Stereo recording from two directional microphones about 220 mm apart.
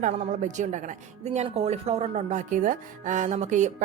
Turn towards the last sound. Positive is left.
turn(degrees=-35)  # may be behind; listen again after turning